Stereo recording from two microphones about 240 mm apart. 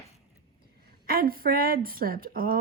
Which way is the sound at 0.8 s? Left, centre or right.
Right.